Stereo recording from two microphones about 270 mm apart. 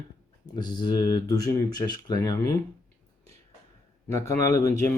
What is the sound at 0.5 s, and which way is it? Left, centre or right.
Speech, centre.